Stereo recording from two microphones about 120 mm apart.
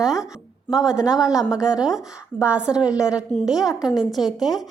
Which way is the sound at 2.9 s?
30° left (ahead or behind).